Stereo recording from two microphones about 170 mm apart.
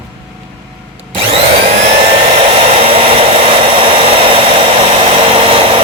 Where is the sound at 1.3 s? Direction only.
40° right (ahead or behind).